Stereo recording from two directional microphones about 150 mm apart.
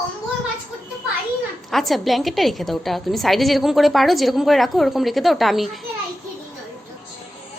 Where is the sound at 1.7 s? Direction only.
Centre (ahead or behind).